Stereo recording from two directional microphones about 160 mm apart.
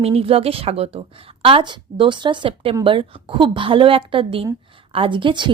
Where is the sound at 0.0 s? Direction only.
35° right (ahead or behind).